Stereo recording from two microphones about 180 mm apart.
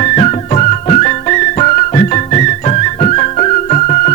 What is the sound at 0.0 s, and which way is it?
Music, 40° left (ahead or behind).